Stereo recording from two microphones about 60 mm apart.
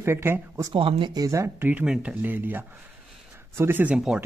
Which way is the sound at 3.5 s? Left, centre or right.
Right.